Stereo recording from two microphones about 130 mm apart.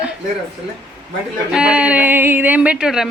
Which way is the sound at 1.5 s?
5° right (ahead or behind).